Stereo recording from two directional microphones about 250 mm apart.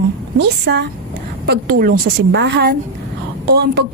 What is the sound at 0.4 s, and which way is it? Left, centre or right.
A woman's voice, right.